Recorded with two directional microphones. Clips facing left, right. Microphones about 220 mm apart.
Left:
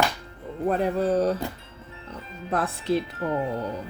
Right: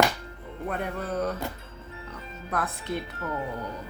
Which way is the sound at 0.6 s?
30° left (ahead or behind).